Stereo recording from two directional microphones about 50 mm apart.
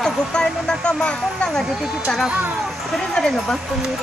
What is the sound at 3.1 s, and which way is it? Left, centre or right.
Speech, centre.